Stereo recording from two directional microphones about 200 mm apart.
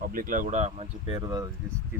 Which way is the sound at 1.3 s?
20° right (ahead or behind).